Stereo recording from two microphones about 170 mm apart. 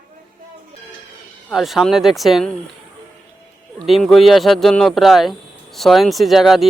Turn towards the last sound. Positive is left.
turn(degrees=0)  # may be behind; listen again after turning